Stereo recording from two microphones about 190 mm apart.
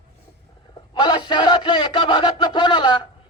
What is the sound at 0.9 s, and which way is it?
Speech, 25° left (ahead or behind).